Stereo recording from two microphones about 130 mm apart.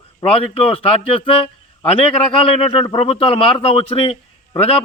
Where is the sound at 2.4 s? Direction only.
45° left (ahead or behind).